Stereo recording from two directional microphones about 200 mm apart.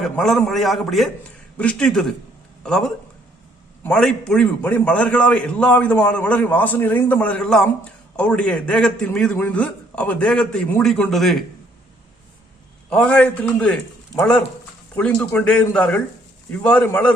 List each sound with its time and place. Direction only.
0.0 s a man's voice: centre (ahead or behind)
12.9 s a man's voice: 5° left (ahead or behind)